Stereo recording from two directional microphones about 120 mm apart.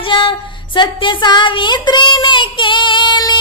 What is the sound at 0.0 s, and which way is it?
Child singing, 45° left (ahead or behind).